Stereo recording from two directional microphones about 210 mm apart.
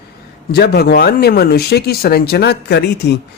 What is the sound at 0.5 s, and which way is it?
Speech, 50° left (ahead or behind).